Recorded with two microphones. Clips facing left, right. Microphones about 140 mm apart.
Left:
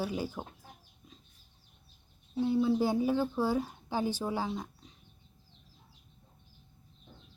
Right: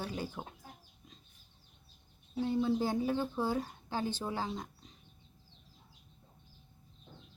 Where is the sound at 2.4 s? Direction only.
5° left (ahead or behind).